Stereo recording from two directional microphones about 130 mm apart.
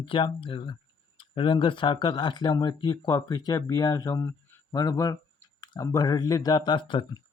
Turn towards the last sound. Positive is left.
turn(degrees=40)  # may be behind; listen again after turning